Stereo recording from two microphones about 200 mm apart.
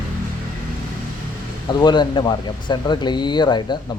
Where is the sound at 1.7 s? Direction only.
20° left (ahead or behind).